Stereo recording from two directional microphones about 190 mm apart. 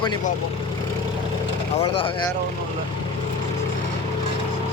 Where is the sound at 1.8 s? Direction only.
30° left (ahead or behind).